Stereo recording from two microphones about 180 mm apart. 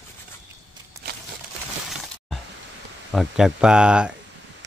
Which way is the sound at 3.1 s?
5° right (ahead or behind).